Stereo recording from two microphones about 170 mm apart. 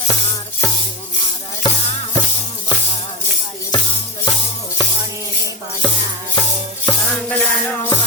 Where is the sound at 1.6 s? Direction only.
30° left (ahead or behind).